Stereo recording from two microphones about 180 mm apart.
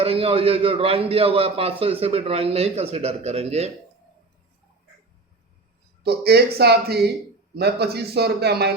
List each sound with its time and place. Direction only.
0.0 s a man's voice: 30° right (ahead or behind)
6.0 s a man's voice: 65° right (ahead or behind)